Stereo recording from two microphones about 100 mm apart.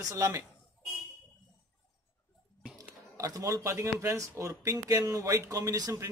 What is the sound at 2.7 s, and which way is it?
A man's voice, 35° right (ahead or behind).